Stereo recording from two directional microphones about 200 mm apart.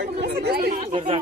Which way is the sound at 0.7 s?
30° right (ahead or behind).